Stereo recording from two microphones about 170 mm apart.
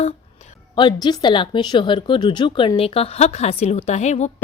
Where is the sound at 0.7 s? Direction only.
25° left (ahead or behind).